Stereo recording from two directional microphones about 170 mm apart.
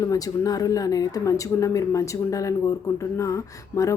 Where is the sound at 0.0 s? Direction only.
20° left (ahead or behind).